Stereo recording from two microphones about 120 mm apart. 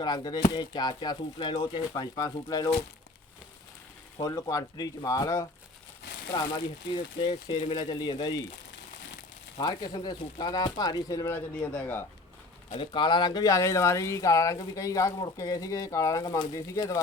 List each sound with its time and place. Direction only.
0.0 s speech: 35° left (ahead or behind)
4.2 s speech: 30° left (ahead or behind)
6.3 s speech: 40° left (ahead or behind)
9.6 s speech: 35° left (ahead or behind)
11.5 s speech: 10° left (ahead or behind)
12.7 s speech: 45° left (ahead or behind); by 17.0 s 30° left (ahead or behind)